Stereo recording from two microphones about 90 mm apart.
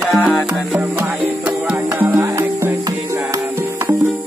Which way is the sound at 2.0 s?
20° right (ahead or behind).